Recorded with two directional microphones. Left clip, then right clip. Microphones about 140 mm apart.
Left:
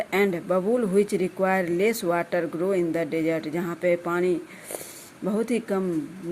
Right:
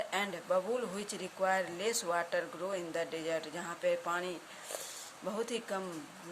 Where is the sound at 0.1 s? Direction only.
45° left (ahead or behind).